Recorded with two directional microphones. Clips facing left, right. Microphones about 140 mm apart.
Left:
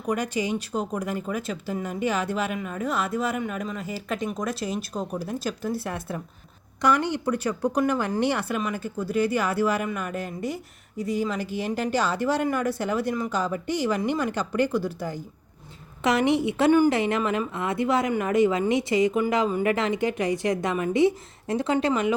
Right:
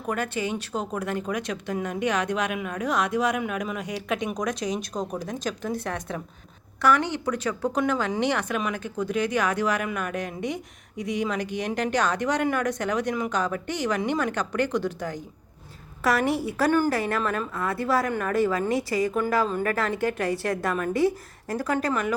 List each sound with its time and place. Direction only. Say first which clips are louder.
0.1 s a woman's voice: left 2 dB; 10° left (ahead or behind)
16.6 s a woman's voice: left 3 dB; 20° left (ahead or behind)